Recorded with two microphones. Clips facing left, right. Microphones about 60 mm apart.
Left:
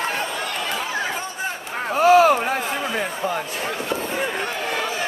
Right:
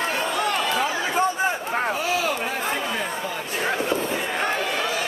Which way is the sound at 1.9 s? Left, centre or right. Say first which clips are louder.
Left 11 dB; left.